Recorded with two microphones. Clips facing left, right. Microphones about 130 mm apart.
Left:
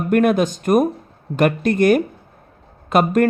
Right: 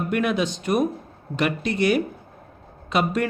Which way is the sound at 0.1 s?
50° left (ahead or behind).